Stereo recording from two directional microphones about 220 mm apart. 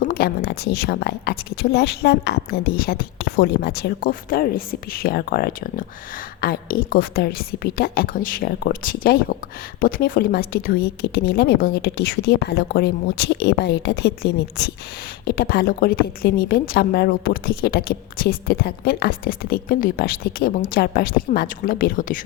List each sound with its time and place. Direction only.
0.0 s a woman's voice: 45° left (ahead or behind)